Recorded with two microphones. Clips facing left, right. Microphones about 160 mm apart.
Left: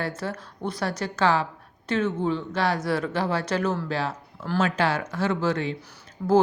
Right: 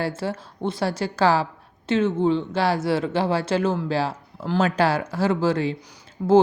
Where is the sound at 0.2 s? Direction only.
25° right (ahead or behind).